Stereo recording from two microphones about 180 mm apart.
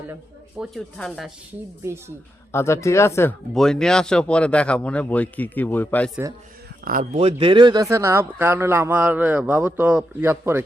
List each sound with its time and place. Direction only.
0.6 s speech: centre (ahead or behind)
1.8 s speech: 15° right (ahead or behind)
2.5 s speech: 15° left (ahead or behind)
3.5 s speech: 5° left (ahead or behind)
6.8 s speech: 45° right (ahead or behind); by 10.6 s 10° right (ahead or behind)